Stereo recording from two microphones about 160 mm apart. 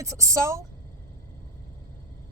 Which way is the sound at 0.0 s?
20° right (ahead or behind).